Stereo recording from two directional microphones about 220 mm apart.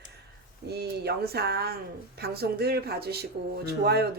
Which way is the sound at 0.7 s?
45° right (ahead or behind).